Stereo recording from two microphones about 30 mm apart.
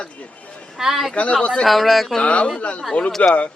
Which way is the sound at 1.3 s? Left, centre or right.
Left.